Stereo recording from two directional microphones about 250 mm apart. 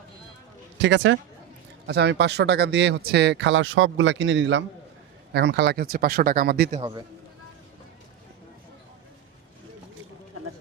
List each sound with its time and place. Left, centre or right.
0.8 s speech: right
6.7 s a man's voice: centre